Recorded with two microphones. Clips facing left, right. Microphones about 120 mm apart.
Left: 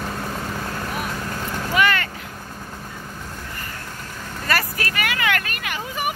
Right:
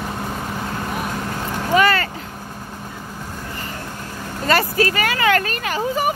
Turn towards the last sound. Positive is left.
turn(degrees=-35)  # may be behind; listen again after turning